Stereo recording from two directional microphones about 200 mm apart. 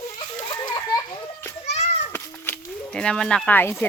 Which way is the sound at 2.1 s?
10° left (ahead or behind).